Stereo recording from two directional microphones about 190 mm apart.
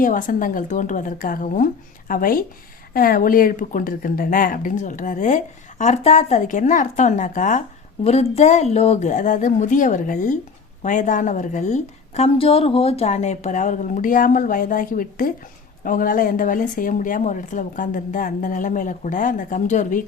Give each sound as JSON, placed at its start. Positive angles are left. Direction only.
{"t": 0.0, "sound": "a woman's voice", "side_deg": 45}